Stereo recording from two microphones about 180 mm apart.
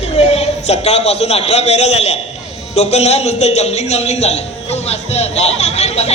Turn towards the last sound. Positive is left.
turn(degrees=35)  # may be behind; listen again after turning